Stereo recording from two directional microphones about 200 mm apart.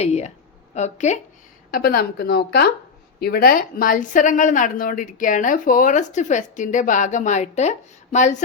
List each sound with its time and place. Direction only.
0.0 s a woman's voice: 35° left (ahead or behind)
1.7 s a woman's voice: 50° left (ahead or behind)